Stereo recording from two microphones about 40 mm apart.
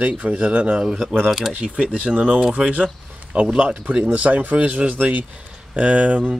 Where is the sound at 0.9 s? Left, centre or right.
Centre.